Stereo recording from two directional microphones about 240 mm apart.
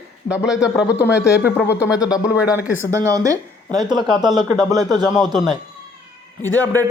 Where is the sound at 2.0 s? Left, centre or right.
Centre.